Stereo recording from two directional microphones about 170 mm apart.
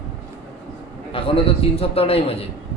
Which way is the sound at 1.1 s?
35° left (ahead or behind).